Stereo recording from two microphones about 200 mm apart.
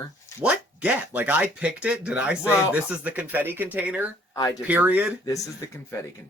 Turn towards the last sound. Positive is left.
turn(degrees=15)  # may be behind; listen again after turning